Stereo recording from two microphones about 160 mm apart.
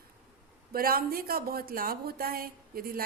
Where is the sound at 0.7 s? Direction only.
65° right (ahead or behind).